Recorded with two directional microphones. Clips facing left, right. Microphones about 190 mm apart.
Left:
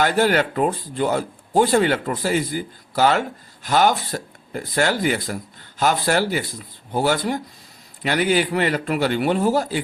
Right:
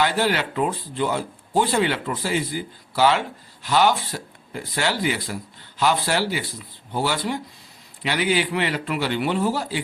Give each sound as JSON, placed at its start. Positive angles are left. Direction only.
{"t": 0.0, "sound": "speech", "side_deg": 45}